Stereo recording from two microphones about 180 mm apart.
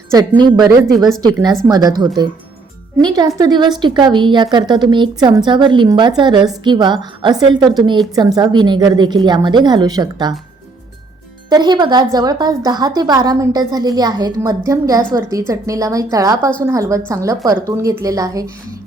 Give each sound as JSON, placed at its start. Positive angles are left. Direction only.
{"t": 0.1, "sound": "a woman's voice", "side_deg": -20}
{"t": 0.9, "sound": "speech", "side_deg": 0}
{"t": 1.2, "sound": "a woman's voice", "side_deg": -20}
{"t": 11.4, "sound": "a woman's voice", "side_deg": -25}